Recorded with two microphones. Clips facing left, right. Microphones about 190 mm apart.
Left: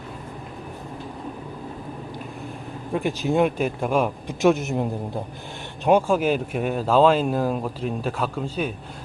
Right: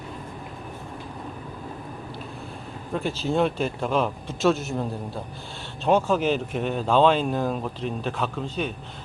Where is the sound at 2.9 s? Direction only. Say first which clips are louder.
Left 3 dB; 15° left (ahead or behind).